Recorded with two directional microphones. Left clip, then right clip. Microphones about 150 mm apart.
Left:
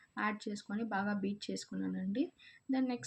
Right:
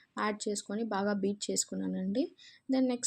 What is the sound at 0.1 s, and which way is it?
Speech, 40° right (ahead or behind).